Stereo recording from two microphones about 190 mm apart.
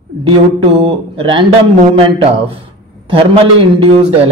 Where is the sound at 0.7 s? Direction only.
30° right (ahead or behind).